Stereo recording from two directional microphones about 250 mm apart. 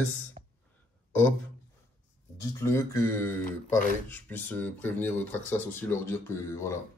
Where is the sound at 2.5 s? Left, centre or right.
Centre.